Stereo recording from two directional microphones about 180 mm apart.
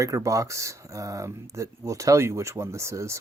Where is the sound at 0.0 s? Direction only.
20° right (ahead or behind).